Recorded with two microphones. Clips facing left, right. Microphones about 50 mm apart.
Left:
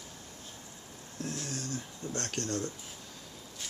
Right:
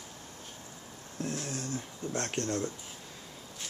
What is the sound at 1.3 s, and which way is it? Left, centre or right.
Speech, centre.